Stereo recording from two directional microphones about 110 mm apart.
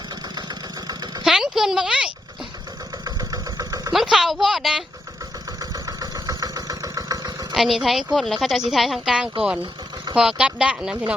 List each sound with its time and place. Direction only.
1.2 s a sound: 5° right (ahead or behind)
3.0 s engine: 35° right (ahead or behind)
3.9 s a woman's voice: 5° right (ahead or behind)
5.7 s engine: 35° right (ahead or behind)
7.5 s a woman's voice: centre (ahead or behind)